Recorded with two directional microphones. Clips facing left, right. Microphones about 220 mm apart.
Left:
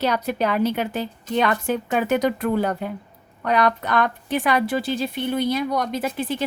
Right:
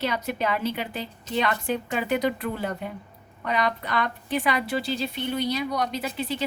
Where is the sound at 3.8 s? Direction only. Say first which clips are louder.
Left 6 dB; 50° left (ahead or behind).